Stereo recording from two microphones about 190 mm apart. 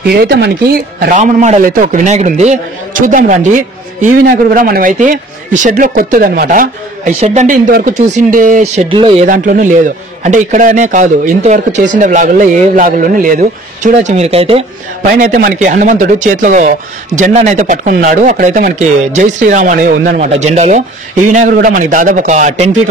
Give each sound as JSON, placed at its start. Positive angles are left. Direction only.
{"t": 0.1, "sound": "a man's voice", "side_deg": -55}
{"t": 1.2, "sound": "a man's voice", "side_deg": -40}
{"t": 8.8, "sound": "speech", "side_deg": -25}
{"t": 9.3, "sound": "a man's voice", "side_deg": -45}
{"t": 15.0, "sound": "a man's voice", "side_deg": -45}